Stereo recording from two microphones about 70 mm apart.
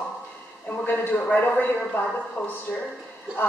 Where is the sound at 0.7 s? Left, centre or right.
Left.